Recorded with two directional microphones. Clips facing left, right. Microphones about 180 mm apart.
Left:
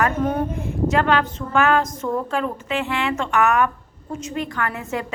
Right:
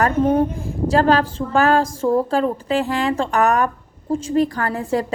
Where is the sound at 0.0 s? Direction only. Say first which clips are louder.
Right 5 dB; 30° right (ahead or behind).